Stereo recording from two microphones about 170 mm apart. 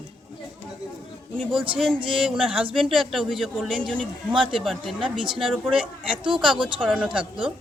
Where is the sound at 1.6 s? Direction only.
30° right (ahead or behind).